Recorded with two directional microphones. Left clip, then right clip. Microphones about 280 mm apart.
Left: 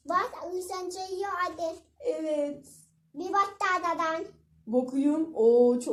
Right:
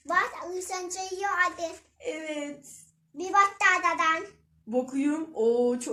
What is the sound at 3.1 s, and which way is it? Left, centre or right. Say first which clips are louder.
Speech: right 4 dB; centre.